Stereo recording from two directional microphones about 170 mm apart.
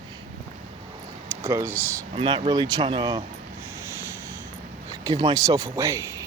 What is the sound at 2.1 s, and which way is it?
Speech, 30° right (ahead or behind).